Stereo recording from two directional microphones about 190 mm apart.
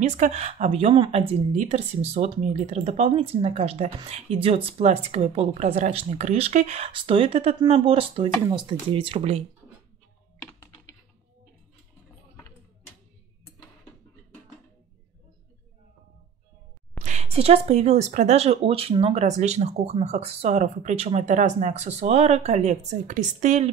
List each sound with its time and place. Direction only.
0.0 s speech: 35° right (ahead or behind)
17.0 s speech: 35° right (ahead or behind)